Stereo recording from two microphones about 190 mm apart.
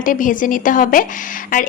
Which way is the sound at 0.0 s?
45° left (ahead or behind).